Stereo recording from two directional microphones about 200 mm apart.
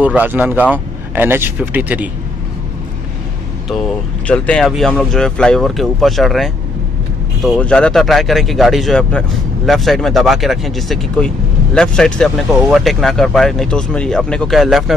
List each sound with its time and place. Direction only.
0.0 s speech: 10° right (ahead or behind)
3.6 s speech: centre (ahead or behind)